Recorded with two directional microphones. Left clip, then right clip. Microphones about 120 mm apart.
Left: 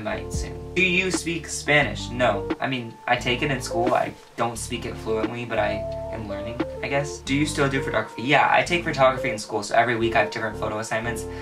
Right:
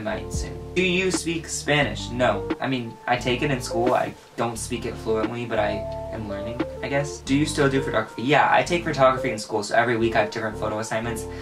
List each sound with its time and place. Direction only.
0.8 s speech: centre (ahead or behind)